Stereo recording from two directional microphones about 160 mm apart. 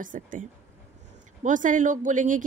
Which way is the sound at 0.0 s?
55° right (ahead or behind).